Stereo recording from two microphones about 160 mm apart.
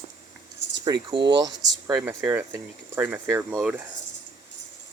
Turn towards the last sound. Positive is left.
turn(degrees=-5)  # may be behind; listen again after turning